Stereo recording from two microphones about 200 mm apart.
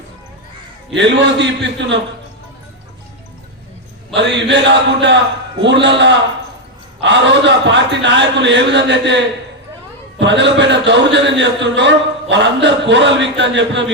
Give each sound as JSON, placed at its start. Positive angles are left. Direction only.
{"t": 0.9, "sound": "a man's voice", "side_deg": -60}
{"t": 4.1, "sound": "a man's voice", "side_deg": -60}